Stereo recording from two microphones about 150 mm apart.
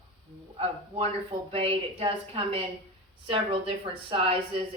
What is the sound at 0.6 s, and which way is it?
A woman's voice, 40° right (ahead or behind).